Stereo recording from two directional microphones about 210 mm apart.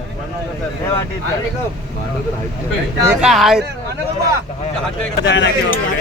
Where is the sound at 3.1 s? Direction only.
5° right (ahead or behind).